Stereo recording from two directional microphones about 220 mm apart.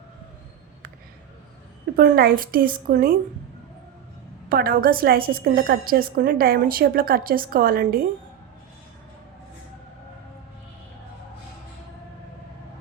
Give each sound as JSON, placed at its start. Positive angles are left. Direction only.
{"t": 2.0, "sound": "a woman's voice", "side_deg": -45}
{"t": 4.4, "sound": "a woman's voice", "side_deg": -45}